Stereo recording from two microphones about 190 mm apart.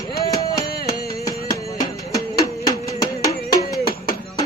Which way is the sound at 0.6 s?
55° left (ahead or behind).